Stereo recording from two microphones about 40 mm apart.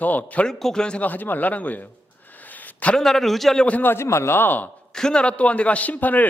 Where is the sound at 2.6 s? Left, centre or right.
Left.